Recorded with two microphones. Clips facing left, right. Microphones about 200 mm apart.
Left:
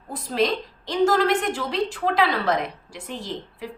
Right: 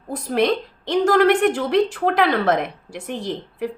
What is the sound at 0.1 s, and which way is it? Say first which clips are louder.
A woman's voice: right 4 dB; 60° right (ahead or behind).